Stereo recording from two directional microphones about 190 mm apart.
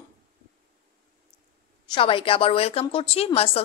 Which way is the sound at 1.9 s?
30° left (ahead or behind).